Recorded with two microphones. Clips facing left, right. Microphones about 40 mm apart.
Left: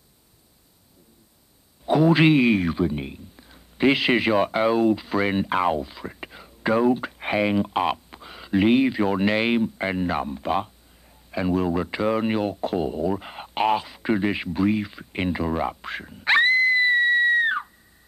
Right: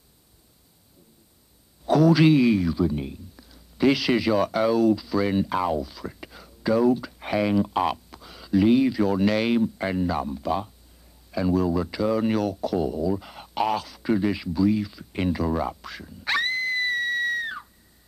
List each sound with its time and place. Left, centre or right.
1.9 s speech: left
2.9 s speech: left
15.2 s a sound: left